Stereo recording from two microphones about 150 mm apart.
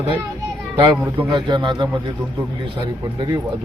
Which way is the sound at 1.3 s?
30° right (ahead or behind).